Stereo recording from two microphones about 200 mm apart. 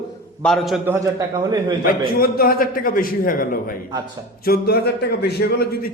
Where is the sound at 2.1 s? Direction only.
50° left (ahead or behind).